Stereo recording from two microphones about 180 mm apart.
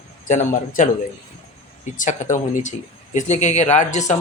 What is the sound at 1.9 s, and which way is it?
A man's voice, 45° left (ahead or behind).